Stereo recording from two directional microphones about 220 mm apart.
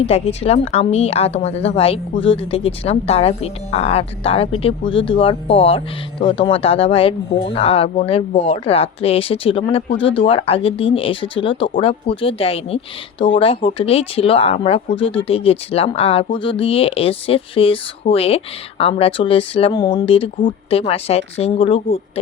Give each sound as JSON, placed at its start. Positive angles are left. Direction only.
{"t": 0.0, "sound": "a woman's voice", "side_deg": 25}